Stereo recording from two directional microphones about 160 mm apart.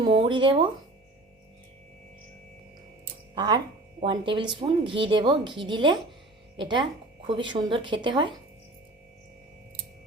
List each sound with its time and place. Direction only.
0.0 s speech: 30° right (ahead or behind)
3.3 s a woman's voice: 25° right (ahead or behind)